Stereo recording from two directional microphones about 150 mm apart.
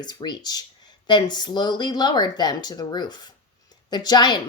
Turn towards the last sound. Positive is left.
turn(degrees=30)  # may be behind; listen again after turning